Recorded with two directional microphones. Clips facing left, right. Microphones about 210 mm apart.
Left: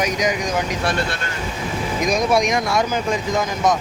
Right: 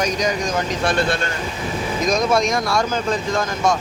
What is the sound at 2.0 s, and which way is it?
Speech, 15° left (ahead or behind).